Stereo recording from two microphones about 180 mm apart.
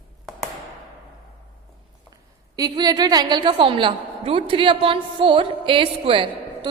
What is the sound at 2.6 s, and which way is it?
A woman's voice, 20° right (ahead or behind).